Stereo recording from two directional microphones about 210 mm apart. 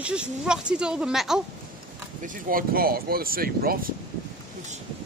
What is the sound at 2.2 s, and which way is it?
Speech, 45° right (ahead or behind).